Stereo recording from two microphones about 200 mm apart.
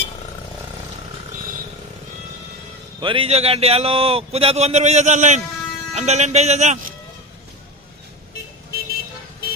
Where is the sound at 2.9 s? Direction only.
25° right (ahead or behind).